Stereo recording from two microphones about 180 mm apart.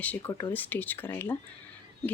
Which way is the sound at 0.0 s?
10° left (ahead or behind).